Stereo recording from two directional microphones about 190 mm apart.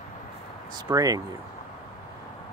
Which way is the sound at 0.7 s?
20° right (ahead or behind).